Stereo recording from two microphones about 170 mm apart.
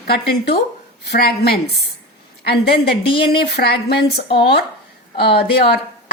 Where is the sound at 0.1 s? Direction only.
70° left (ahead or behind).